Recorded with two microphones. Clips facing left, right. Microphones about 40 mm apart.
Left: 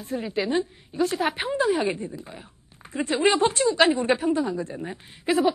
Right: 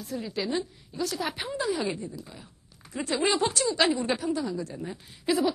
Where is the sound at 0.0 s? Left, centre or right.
Left.